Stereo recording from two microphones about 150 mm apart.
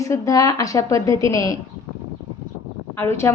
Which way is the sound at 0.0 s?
20° left (ahead or behind).